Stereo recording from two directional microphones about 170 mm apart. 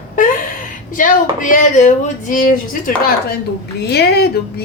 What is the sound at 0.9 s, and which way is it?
Speech, 50° left (ahead or behind).